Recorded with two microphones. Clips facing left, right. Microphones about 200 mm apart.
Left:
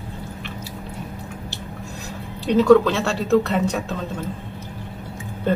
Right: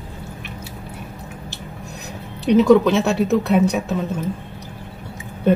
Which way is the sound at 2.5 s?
15° right (ahead or behind).